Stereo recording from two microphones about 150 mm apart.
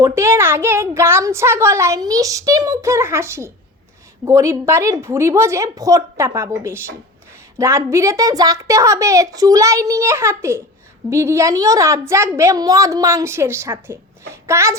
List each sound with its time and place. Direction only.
0.0 s a child's voice: 15° right (ahead or behind)